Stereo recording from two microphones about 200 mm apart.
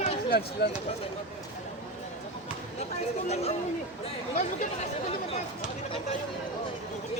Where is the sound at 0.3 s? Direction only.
50° left (ahead or behind).